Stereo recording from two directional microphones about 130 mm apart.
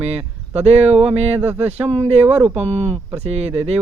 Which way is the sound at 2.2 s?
15° right (ahead or behind).